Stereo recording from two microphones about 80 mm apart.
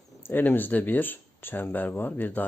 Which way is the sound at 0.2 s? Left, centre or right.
Left.